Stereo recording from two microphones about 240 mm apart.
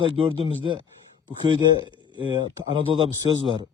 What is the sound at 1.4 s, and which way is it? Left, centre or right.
Speech, centre.